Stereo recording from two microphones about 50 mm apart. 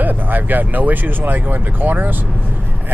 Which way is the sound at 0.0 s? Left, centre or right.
Right.